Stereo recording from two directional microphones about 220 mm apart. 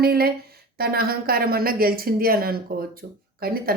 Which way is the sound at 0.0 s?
45° right (ahead or behind).